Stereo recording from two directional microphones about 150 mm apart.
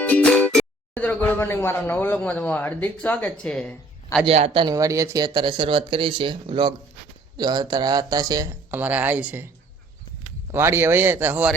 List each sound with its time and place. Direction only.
0.0 s speech: 10° left (ahead or behind)
4.3 s speech: 40° right (ahead or behind)
4.7 s speech: 20° right (ahead or behind)
8.7 s speech: 10° right (ahead or behind)
10.5 s speech: 15° right (ahead or behind)